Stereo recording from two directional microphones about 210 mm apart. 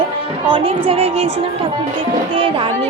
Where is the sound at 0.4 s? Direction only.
25° right (ahead or behind).